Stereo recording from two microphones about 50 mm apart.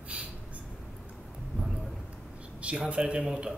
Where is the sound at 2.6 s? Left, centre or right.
Right.